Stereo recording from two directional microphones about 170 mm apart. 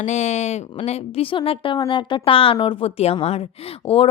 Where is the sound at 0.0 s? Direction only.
45° left (ahead or behind).